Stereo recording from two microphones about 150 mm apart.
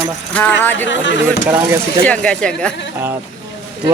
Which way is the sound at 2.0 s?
5° left (ahead or behind).